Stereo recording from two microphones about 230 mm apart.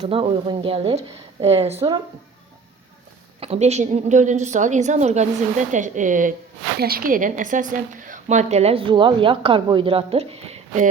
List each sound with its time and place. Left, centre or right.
0.0 s a woman's voice: right
3.4 s a woman's voice: right